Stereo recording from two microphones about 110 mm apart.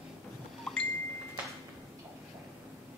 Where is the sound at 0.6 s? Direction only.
5° left (ahead or behind).